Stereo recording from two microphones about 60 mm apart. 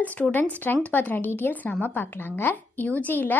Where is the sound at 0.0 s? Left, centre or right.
Left.